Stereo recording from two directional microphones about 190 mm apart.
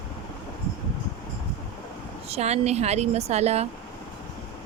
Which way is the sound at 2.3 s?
35° right (ahead or behind).